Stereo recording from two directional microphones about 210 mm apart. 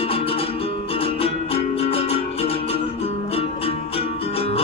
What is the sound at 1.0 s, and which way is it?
Music, 30° left (ahead or behind).